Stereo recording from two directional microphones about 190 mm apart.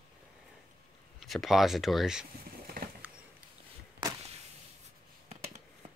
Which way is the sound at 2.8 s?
50° right (ahead or behind).